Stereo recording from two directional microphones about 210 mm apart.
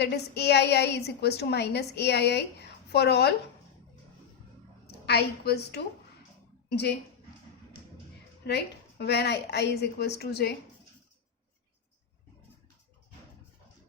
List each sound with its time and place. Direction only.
0.0 s a woman's voice: 50° left (ahead or behind)
4.9 s a woman's voice: 50° left (ahead or behind)
8.4 s a woman's voice: 50° left (ahead or behind)